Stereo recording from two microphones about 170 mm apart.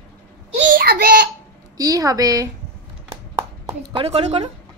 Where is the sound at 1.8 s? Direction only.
20° right (ahead or behind).